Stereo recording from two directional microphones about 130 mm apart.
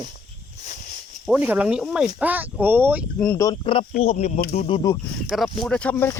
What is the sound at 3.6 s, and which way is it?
Speech, 45° left (ahead or behind).